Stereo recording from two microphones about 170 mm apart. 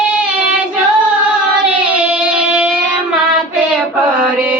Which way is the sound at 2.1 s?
5° right (ahead or behind).